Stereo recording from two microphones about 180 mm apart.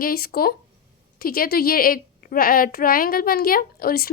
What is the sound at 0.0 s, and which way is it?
A woman's voice, 55° left (ahead or behind).